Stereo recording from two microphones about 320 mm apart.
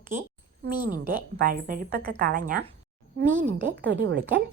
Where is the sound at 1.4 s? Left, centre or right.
Right.